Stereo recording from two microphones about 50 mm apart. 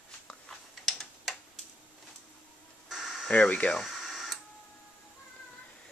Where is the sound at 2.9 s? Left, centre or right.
Centre.